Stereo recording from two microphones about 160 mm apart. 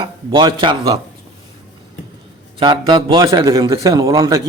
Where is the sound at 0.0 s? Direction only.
30° right (ahead or behind).